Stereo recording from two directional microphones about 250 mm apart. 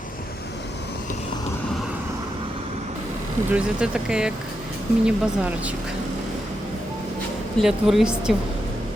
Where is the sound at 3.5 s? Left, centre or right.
Centre.